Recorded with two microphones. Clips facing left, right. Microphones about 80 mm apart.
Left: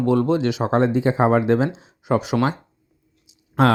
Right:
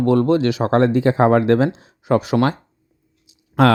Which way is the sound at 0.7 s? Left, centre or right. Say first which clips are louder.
Right 3 dB; right.